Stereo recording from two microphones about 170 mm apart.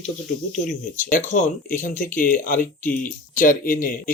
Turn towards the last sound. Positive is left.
turn(degrees=55)  # may be behind; listen again after turning